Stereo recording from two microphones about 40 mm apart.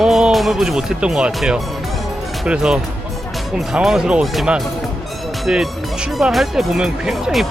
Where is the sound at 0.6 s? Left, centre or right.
Centre.